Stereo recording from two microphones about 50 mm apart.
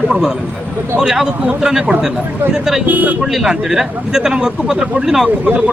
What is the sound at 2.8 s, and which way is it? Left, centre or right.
Speech, right.